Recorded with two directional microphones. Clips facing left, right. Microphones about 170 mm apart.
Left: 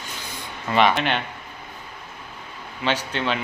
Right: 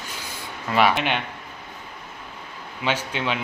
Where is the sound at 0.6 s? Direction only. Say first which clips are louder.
Left 1 dB; 5° right (ahead or behind).